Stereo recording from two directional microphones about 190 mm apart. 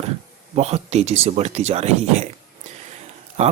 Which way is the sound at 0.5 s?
35° right (ahead or behind).